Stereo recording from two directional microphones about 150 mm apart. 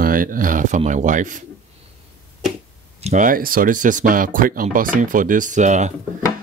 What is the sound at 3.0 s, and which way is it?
Speech, 60° right (ahead or behind).